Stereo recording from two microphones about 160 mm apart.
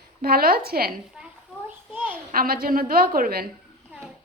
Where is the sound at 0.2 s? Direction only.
70° right (ahead or behind).